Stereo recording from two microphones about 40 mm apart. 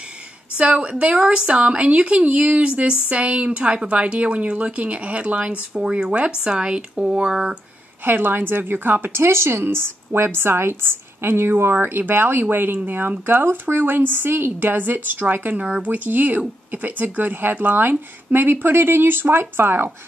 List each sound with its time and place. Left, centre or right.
0.6 s a woman's voice: right
5.8 s speech: right
6.1 s speech: right
8.0 s speech: right
9.1 s a woman's voice: right
15.8 s speech: right